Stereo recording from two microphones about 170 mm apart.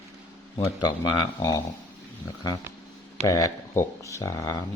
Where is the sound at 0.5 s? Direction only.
25° left (ahead or behind).